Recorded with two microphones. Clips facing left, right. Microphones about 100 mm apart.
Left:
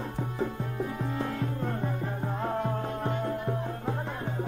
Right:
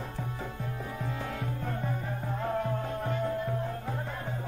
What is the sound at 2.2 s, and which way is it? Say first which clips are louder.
Music: left 1 dB; 20° left (ahead or behind).